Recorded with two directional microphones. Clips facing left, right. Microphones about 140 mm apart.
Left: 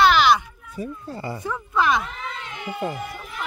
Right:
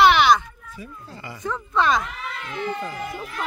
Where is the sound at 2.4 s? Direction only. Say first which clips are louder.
Right 6 dB; 20° left (ahead or behind).